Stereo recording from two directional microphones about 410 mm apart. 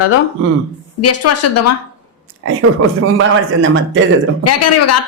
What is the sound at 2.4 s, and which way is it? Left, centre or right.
A man's voice, right.